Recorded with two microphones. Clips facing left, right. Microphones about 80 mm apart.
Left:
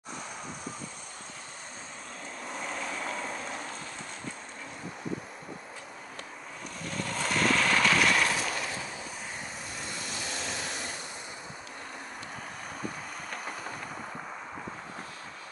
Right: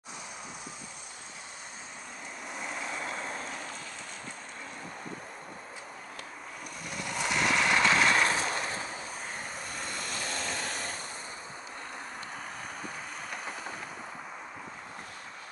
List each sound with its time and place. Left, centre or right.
2.6 s vehicle: centre
6.9 s vehicle: centre; by 11.0 s right